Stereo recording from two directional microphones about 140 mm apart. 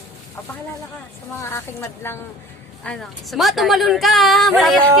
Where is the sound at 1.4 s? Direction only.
20° left (ahead or behind).